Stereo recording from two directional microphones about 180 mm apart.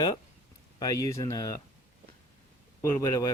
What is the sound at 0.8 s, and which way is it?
Speech, 20° left (ahead or behind).